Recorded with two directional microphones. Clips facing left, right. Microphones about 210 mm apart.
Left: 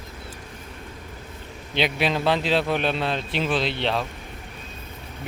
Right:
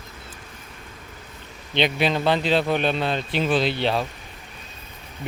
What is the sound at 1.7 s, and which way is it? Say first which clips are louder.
A man's voice: right 2 dB; 5° left (ahead or behind).